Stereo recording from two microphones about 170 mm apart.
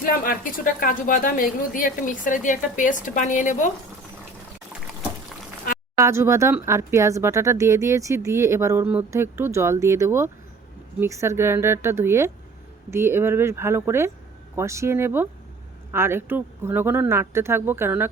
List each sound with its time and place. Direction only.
0.0 s speech: 55° left (ahead or behind)
6.0 s speech: 15° right (ahead or behind)